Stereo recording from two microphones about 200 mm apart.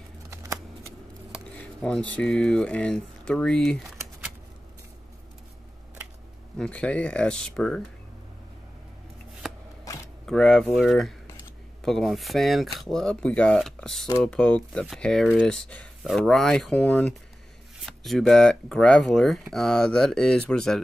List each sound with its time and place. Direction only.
0.3 s shuffling cards: 15° right (ahead or behind)
1.6 s speech: 5° left (ahead or behind)
6.6 s speech: 5° left (ahead or behind)
10.2 s speech: 5° left (ahead or behind)